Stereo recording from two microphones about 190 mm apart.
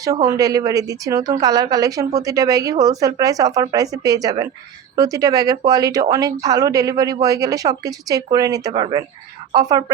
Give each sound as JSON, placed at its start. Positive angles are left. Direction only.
{"t": 0.0, "sound": "speech", "side_deg": -15}